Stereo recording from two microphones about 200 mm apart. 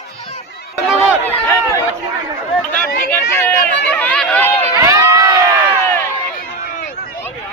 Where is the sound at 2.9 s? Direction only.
50° left (ahead or behind).